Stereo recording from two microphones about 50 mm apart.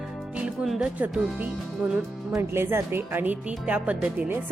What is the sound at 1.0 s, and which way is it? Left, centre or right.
Speech, right.